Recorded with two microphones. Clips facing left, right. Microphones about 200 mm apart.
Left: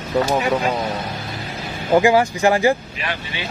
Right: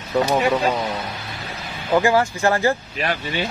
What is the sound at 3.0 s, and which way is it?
Speech, 40° right (ahead or behind).